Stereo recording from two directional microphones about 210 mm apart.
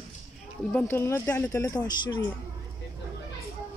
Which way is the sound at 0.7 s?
10° left (ahead or behind).